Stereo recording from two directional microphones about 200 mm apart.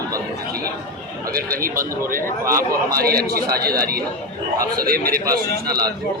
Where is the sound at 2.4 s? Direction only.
15° right (ahead or behind).